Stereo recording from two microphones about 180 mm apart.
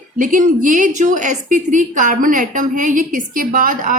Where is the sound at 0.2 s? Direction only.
50° right (ahead or behind).